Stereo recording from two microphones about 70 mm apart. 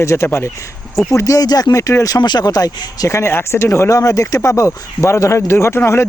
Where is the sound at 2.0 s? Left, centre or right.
Left.